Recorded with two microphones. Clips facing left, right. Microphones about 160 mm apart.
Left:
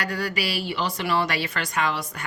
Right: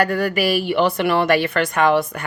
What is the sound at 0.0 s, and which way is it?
A woman's voice, 55° right (ahead or behind).